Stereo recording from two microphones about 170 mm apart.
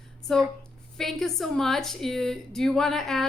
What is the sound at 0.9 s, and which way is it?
A woman's voice, centre (ahead or behind).